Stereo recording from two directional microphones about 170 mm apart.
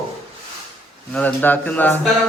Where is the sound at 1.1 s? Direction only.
10° left (ahead or behind).